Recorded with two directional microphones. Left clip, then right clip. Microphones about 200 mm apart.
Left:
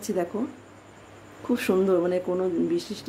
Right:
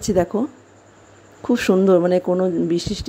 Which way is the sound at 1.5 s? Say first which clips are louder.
Right 7 dB; 40° right (ahead or behind).